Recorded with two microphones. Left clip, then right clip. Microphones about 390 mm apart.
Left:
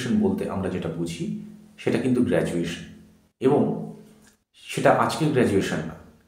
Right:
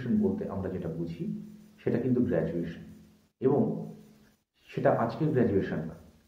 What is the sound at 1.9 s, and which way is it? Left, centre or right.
Speech, right.